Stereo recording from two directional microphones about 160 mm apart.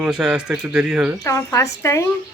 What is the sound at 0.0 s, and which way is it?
Speech, 5° right (ahead or behind).